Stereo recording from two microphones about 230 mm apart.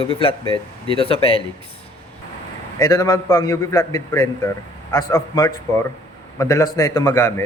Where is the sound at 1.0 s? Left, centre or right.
Left.